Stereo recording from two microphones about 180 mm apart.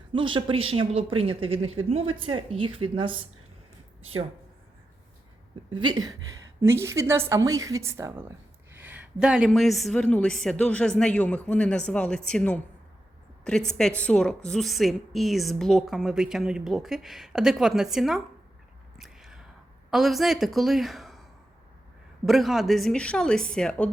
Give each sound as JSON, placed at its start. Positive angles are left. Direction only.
{"t": 0.1, "sound": "speech", "side_deg": -25}
{"t": 5.7, "sound": "a woman's voice", "side_deg": -25}
{"t": 18.9, "sound": "a sound", "side_deg": 0}
{"t": 19.9, "sound": "a woman's voice", "side_deg": 0}
{"t": 22.3, "sound": "a woman's voice", "side_deg": 0}